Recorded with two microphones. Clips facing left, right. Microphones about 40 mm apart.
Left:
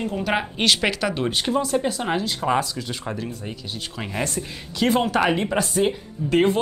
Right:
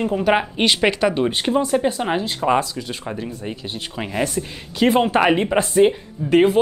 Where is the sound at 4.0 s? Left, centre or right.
Centre.